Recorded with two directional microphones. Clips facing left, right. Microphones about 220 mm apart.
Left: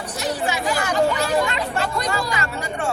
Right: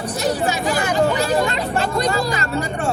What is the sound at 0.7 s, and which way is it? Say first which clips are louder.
Speech: right 1 dB; 25° right (ahead or behind).